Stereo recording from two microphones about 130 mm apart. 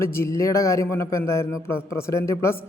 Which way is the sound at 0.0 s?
20° left (ahead or behind).